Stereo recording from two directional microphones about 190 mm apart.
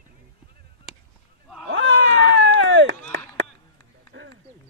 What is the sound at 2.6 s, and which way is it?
Chop, 90° right.